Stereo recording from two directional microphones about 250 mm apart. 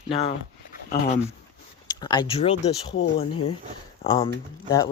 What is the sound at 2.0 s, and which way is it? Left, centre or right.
Speech, centre.